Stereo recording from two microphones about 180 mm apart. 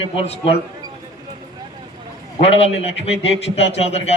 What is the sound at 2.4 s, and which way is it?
A man's voice, 35° left (ahead or behind).